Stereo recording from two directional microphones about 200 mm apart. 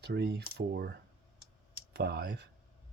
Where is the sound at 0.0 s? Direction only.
55° right (ahead or behind).